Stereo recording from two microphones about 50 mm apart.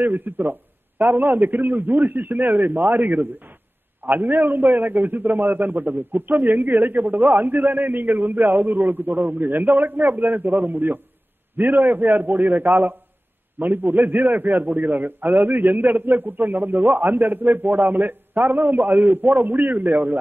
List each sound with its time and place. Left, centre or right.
0.0 s a man's voice: right